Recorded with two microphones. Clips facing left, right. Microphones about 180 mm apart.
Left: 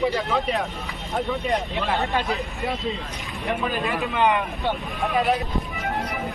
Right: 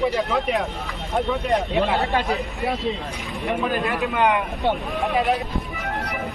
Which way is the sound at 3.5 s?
Centre (ahead or behind).